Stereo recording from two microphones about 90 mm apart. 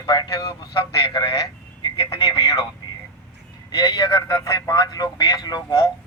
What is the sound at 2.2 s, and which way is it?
Vehicle, 40° left (ahead or behind).